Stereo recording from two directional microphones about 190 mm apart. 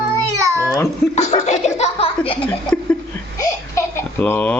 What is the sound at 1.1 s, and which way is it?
Speech, 35° left (ahead or behind).